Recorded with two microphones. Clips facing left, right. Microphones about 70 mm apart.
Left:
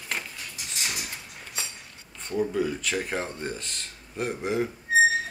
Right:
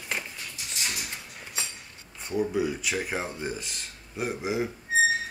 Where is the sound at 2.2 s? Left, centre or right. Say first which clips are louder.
Even; centre.